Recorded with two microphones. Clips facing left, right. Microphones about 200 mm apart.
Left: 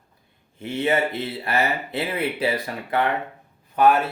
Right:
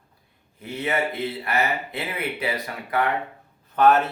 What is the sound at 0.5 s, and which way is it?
Speech, 25° left (ahead or behind).